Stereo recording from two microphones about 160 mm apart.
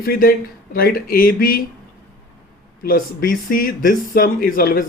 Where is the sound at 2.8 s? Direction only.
65° left (ahead or behind).